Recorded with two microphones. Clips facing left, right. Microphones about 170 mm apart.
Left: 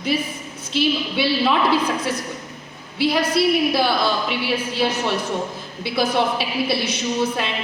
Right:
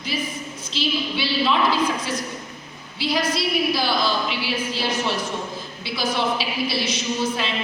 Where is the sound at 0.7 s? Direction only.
60° left (ahead or behind).